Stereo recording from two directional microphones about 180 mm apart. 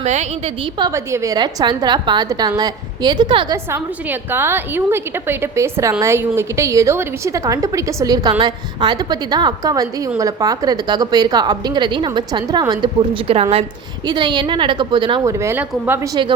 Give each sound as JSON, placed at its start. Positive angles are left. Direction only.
{"t": 0.0, "sound": "a woman's voice", "side_deg": -40}
{"t": 0.8, "sound": "a woman's voice", "side_deg": -15}
{"t": 3.7, "sound": "a woman's voice", "side_deg": -10}